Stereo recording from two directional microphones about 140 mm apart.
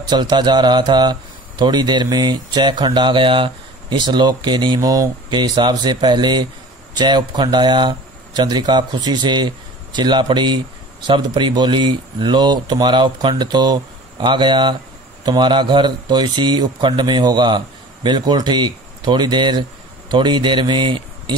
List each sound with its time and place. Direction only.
0.0 s speech: 30° right (ahead or behind)